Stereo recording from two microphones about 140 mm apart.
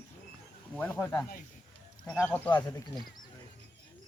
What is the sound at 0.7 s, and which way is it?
Speech, 10° left (ahead or behind).